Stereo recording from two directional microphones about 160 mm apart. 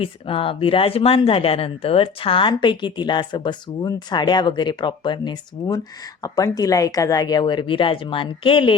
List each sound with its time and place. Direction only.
0.0 s speech: 35° left (ahead or behind)